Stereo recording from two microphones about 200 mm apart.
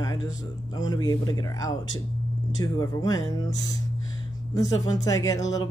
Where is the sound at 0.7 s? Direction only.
20° left (ahead or behind).